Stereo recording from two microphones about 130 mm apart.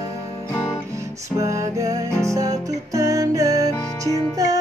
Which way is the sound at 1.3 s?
25° right (ahead or behind).